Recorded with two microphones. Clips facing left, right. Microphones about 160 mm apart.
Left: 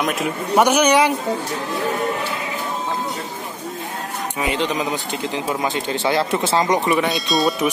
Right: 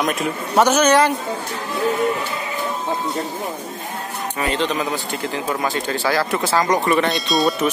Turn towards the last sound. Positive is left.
turn(degrees=0)  # may be behind; listen again after turning